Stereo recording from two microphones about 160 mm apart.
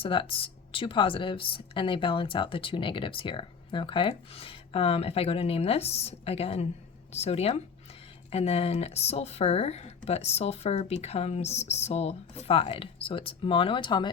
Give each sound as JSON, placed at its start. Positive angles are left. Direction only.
{"t": 0.0, "sound": "speech", "side_deg": 30}